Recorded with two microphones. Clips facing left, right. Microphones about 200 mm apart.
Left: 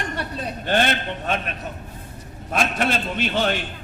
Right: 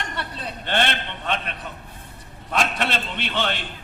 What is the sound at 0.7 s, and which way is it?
A man's voice, 40° left (ahead or behind).